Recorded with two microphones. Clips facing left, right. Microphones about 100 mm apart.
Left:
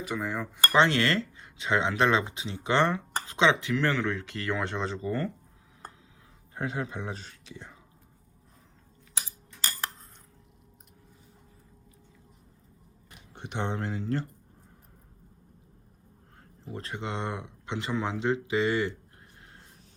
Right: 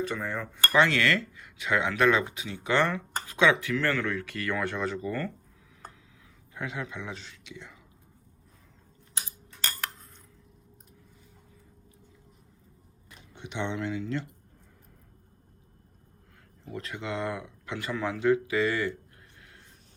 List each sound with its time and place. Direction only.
0.0 s cutlery: 15° left (ahead or behind)
0.8 s speech: 30° left (ahead or behind)
6.5 s speech: 35° left (ahead or behind)
13.3 s speech: 50° left (ahead or behind)
16.7 s speech: 30° left (ahead or behind)